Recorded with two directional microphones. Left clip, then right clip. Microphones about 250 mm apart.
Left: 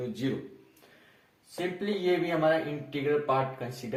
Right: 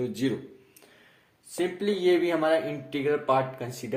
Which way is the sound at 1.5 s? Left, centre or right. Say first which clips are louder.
Right 4 dB; right.